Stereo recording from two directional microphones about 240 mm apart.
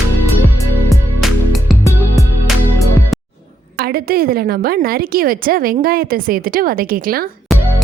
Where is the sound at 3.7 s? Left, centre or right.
Right.